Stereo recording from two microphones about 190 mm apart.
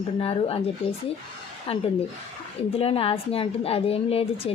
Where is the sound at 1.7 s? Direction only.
30° left (ahead or behind).